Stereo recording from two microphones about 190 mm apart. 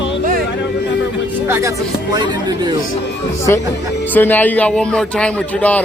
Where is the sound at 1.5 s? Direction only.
10° right (ahead or behind).